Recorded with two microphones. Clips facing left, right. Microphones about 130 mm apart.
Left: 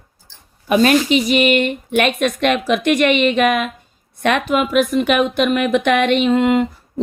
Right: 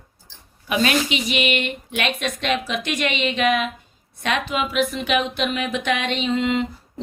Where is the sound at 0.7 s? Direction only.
45° left (ahead or behind).